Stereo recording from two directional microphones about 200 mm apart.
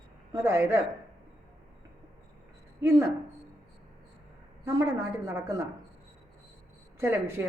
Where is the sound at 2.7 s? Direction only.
15° right (ahead or behind).